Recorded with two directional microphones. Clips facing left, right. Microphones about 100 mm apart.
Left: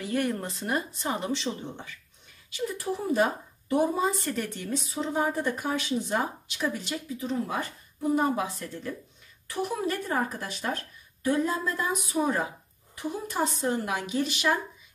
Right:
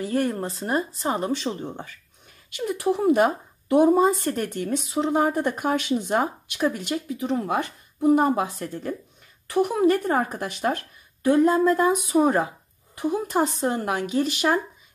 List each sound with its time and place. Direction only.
0.0 s speech: 35° right (ahead or behind)
2.8 s speech: 65° right (ahead or behind); by 14.6 s 45° right (ahead or behind)